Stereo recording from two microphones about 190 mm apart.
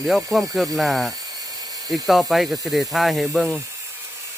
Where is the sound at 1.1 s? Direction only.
20° right (ahead or behind).